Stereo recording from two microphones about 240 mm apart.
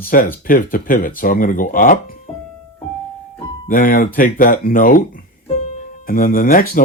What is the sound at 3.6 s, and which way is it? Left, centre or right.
Speech, left.